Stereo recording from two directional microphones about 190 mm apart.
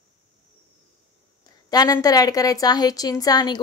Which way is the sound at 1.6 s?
20° left (ahead or behind).